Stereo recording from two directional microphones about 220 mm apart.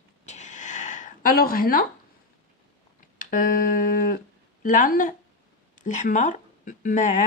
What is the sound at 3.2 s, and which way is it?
Speech, 35° left (ahead or behind).